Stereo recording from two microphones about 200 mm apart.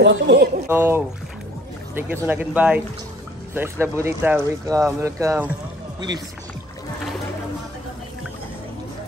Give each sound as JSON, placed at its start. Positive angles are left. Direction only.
{"t": 0.0, "sound": "speech", "side_deg": -60}
{"t": 0.7, "sound": "speech", "side_deg": -10}